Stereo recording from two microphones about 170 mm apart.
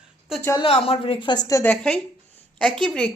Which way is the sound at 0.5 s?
35° left (ahead or behind).